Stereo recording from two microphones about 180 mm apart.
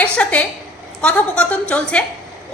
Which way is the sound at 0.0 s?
5° left (ahead or behind).